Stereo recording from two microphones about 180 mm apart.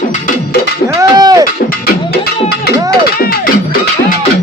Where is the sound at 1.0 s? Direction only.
20° right (ahead or behind).